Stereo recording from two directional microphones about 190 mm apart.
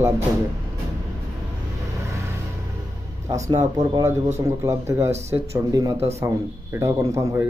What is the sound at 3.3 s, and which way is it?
Speech, 15° right (ahead or behind).